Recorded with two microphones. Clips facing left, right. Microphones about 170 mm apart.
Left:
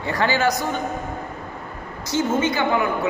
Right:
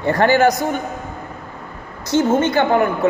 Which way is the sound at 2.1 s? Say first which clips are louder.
Right 5 dB; 60° right (ahead or behind).